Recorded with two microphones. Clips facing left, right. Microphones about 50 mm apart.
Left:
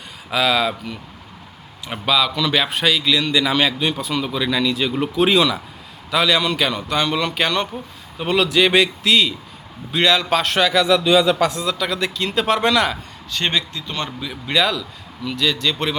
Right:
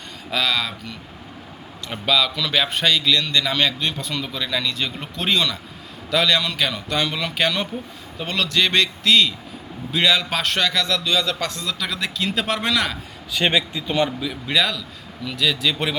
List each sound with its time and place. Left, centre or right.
0.3 s speech: centre
13.3 s speech: centre
14.3 s speech: centre